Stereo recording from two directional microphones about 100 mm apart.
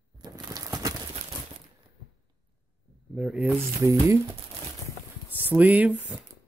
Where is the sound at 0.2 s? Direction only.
40° right (ahead or behind).